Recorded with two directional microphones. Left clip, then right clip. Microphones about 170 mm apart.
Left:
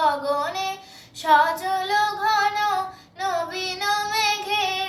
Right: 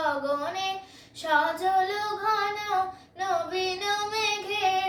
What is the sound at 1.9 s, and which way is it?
Female singing, 20° right (ahead or behind).